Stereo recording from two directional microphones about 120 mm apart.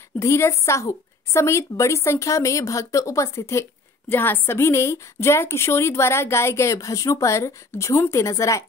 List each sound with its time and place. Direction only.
0.2 s a woman's voice: 25° left (ahead or behind)